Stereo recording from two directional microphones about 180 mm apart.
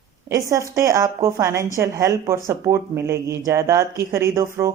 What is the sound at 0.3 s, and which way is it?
A woman's voice, 15° right (ahead or behind).